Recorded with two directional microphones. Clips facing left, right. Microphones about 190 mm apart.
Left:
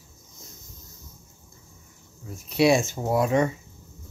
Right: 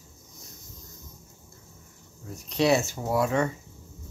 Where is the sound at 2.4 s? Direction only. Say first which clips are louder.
Left 3 dB; 10° left (ahead or behind).